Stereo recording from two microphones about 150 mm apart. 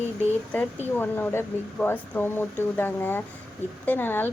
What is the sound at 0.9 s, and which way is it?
Speech, 15° left (ahead or behind).